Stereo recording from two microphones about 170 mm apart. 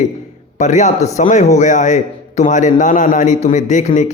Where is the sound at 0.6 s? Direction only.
45° left (ahead or behind).